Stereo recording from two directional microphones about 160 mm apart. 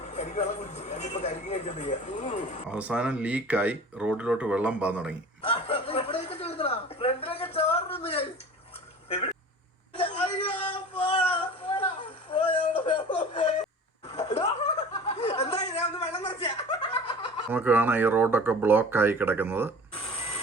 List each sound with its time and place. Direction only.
0.1 s speech: 45° left (ahead or behind)
2.6 s speech: 10° right (ahead or behind)
5.4 s chuckle: 35° left (ahead or behind)
10.7 s a sound: 30° left (ahead or behind)
12.3 s music: 30° left (ahead or behind)
14.1 s chuckle: 40° left (ahead or behind)
17.5 s speech: 10° right (ahead or behind)